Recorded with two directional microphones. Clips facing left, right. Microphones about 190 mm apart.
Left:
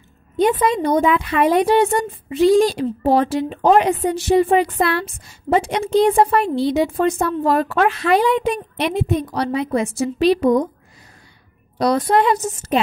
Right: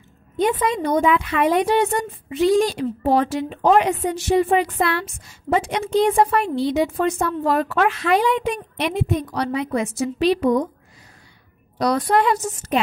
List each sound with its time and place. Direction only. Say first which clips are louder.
0.4 s a woman's voice: left 3 dB; 35° left (ahead or behind)
11.8 s a woman's voice: left 2 dB; 25° left (ahead or behind)